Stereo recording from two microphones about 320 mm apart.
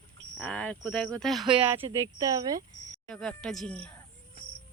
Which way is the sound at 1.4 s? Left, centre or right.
Centre.